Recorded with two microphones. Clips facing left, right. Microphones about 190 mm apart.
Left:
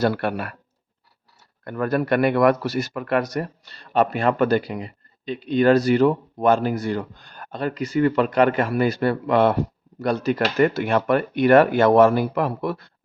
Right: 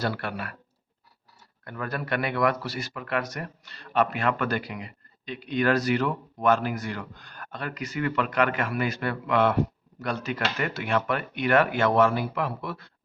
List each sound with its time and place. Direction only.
0.0 s speech: 50° left (ahead or behind)
1.6 s speech: 50° left (ahead or behind)